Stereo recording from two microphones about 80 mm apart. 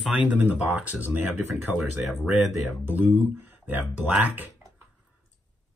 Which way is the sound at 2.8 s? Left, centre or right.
Right.